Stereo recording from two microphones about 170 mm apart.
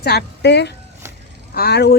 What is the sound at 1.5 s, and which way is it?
Speech, 65° left (ahead or behind).